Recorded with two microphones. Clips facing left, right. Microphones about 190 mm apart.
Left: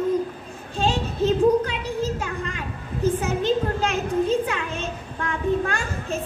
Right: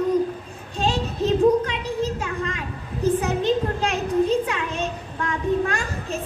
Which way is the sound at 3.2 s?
35° right (ahead or behind).